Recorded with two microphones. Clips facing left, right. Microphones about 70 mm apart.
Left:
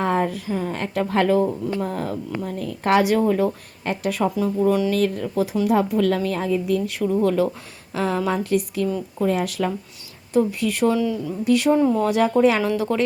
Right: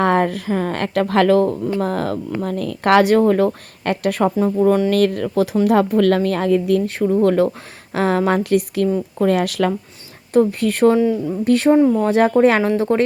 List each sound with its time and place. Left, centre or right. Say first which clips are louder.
0.0 s speech: right 5 dB; right
4.4 s speech: right 4 dB; right
4.9 s speech: right 5 dB; right
6.9 s speech: right 4 dB; right
8.9 s speech: right 5 dB; right
9.2 s speech: right 5 dB; right
10.3 s speech: right 5 dB; right